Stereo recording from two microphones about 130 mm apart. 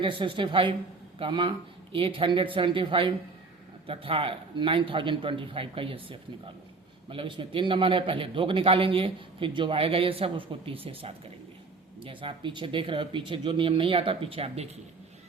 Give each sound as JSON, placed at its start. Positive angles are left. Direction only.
{"t": 0.0, "sound": "a man's voice", "side_deg": -40}